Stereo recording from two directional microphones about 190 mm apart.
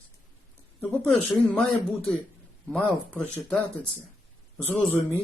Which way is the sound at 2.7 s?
10° left (ahead or behind).